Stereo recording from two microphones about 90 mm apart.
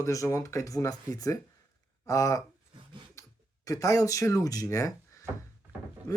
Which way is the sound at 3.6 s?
40° left (ahead or behind).